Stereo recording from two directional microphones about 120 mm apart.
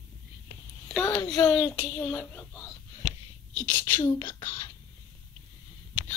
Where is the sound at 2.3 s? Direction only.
20° left (ahead or behind).